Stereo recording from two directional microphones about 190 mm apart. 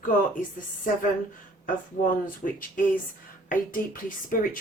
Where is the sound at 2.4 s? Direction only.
45° left (ahead or behind).